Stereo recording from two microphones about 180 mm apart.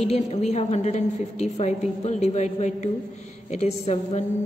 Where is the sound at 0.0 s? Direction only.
35° left (ahead or behind).